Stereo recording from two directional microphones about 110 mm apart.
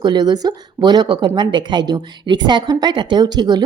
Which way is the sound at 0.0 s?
40° right (ahead or behind).